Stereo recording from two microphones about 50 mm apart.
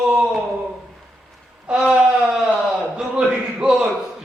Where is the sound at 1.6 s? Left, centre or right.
Centre.